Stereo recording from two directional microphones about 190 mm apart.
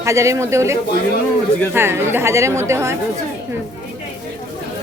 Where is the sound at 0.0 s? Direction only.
15° right (ahead or behind).